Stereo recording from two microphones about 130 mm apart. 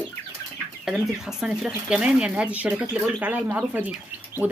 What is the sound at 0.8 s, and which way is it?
Speech, 5° right (ahead or behind).